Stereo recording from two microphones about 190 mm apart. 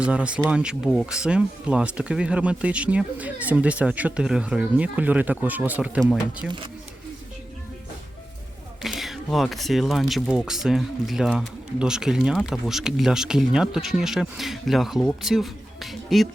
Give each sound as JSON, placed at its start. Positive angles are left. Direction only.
{"t": 0.0, "sound": "speech", "side_deg": -5}
{"t": 8.8, "sound": "speech", "side_deg": 0}